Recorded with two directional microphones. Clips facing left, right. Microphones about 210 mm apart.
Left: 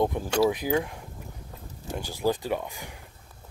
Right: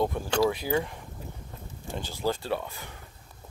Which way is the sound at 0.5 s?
15° left (ahead or behind).